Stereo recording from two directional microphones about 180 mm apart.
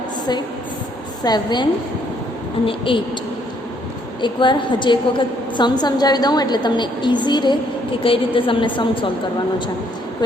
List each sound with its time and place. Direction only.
1.2 s a woman's voice: 25° left (ahead or behind)
2.6 s a woman's voice: 30° left (ahead or behind)
4.2 s a woman's voice: 25° left (ahead or behind)